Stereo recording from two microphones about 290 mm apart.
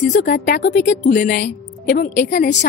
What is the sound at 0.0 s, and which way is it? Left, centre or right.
A woman's voice, left.